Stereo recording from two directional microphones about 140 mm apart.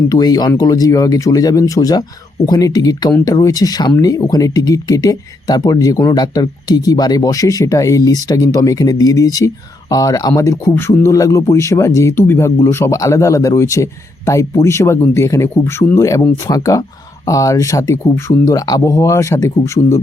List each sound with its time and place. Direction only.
0.1 s speech: 30° left (ahead or behind)